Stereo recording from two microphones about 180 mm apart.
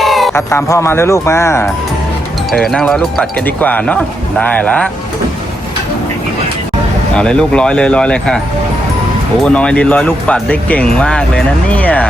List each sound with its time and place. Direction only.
0.0 s music: centre (ahead or behind)
0.3 s speech: 15° left (ahead or behind)
2.5 s speech: centre (ahead or behind)
7.2 s speech: 5° left (ahead or behind)
9.4 s speech: 5° left (ahead or behind)